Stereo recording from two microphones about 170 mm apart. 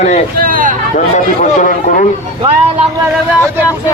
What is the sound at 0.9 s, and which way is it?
Speech, 45° left (ahead or behind).